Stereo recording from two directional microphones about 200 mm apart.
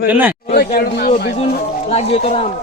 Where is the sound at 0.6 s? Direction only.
50° left (ahead or behind).